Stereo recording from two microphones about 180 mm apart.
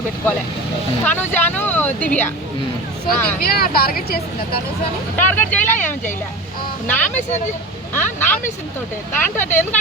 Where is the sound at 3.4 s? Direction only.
60° left (ahead or behind).